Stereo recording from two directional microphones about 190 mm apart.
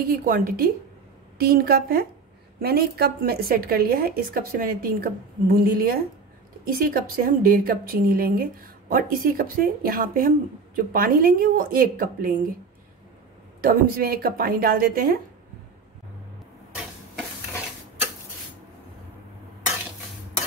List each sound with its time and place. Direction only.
0.0 s a woman's voice: 50° right (ahead or behind)
13.6 s a woman's voice: 50° right (ahead or behind)